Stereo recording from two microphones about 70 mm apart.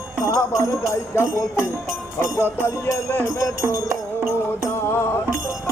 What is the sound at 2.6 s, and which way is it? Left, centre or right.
Music, left.